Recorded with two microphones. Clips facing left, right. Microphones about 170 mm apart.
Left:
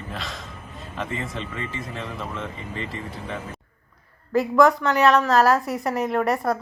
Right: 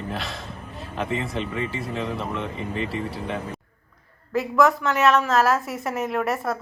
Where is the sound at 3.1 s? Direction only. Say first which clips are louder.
Right 3 dB; 35° right (ahead or behind).